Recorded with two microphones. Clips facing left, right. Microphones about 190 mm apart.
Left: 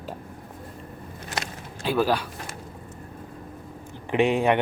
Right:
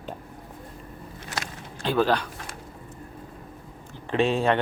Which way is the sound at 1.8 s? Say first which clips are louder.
Even; 10° left (ahead or behind).